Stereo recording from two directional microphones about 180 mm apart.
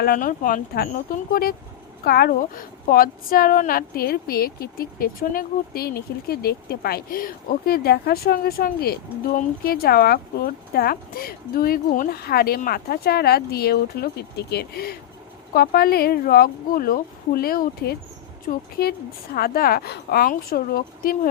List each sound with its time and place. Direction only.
0.0 s a woman's voice: 50° left (ahead or behind)